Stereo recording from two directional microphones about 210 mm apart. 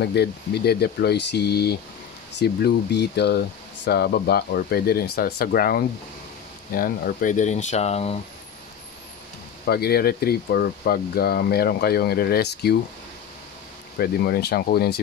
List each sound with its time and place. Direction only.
0.0 s speech: 50° left (ahead or behind); by 8.2 s 30° left (ahead or behind)
9.7 s speech: 50° left (ahead or behind)
13.9 s speech: 45° left (ahead or behind)